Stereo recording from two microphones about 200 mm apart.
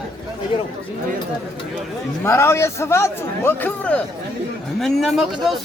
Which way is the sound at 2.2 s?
10° left (ahead or behind).